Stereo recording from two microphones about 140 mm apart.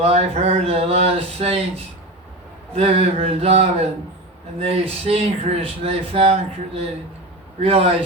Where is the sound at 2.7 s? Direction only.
45° right (ahead or behind).